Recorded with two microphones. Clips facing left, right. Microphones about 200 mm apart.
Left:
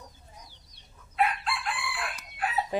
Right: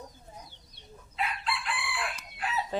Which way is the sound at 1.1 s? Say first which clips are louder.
Left 5 dB; 55° left (ahead or behind).